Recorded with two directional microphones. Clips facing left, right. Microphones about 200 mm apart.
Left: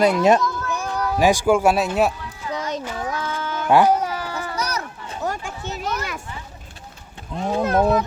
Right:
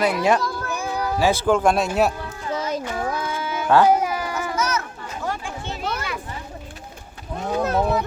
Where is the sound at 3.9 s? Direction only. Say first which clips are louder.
Right 1 dB; 10° right (ahead or behind).